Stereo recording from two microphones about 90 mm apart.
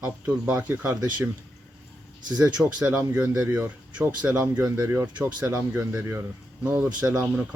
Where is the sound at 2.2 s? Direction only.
50° right (ahead or behind).